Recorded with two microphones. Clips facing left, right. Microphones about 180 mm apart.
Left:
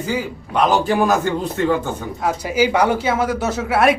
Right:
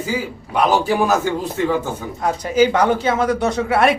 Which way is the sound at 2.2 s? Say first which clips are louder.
Right 2 dB; 10° left (ahead or behind).